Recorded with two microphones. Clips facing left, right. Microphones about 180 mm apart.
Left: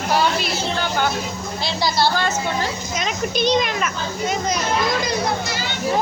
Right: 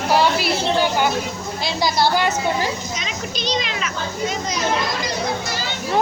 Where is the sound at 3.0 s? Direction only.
55° left (ahead or behind).